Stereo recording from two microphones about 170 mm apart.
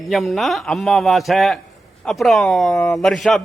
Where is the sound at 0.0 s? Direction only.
Centre (ahead or behind).